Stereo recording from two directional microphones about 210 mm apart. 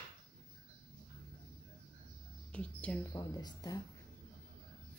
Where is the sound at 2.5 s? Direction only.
5° left (ahead or behind).